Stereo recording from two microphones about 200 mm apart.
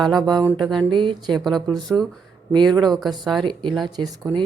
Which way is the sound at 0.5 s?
Centre (ahead or behind).